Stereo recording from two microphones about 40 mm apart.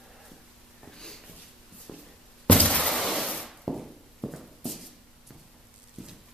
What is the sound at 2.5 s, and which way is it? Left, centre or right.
Shatter, left.